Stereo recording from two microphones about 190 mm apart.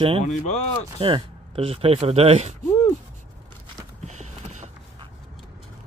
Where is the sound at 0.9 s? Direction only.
30° right (ahead or behind).